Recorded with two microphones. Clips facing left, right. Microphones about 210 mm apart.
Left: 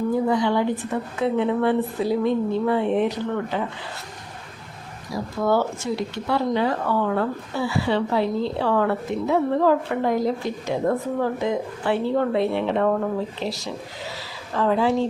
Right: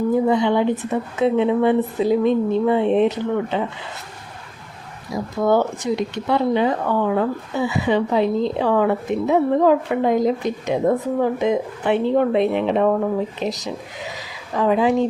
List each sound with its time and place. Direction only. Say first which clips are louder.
0.1 s speech: right 4 dB; 20° right (ahead or behind)
5.1 s speech: right 3 dB; 20° right (ahead or behind)